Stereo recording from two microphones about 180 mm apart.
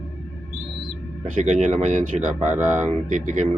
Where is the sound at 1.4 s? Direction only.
40° right (ahead or behind).